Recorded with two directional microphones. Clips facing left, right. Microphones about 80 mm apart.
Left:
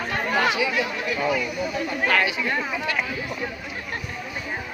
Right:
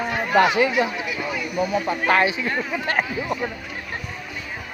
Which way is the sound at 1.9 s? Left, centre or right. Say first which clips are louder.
Right 2 dB; right.